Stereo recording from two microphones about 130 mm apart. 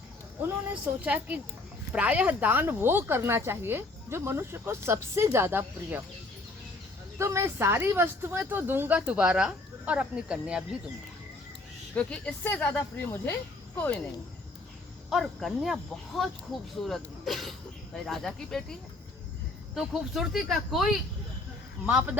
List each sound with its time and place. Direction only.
0.4 s speech: 15° right (ahead or behind)
7.2 s speech: 20° right (ahead or behind); by 10.8 s 5° right (ahead or behind)
11.9 s speech: 10° left (ahead or behind)
15.1 s speech: centre (ahead or behind)